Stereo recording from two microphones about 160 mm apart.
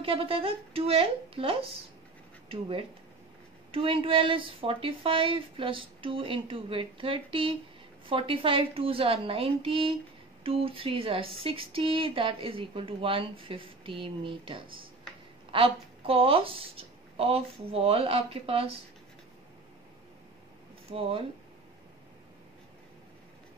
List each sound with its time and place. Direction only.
0.0 s speech: 35° right (ahead or behind)
3.7 s speech: 35° right (ahead or behind)
20.9 s speech: 35° right (ahead or behind)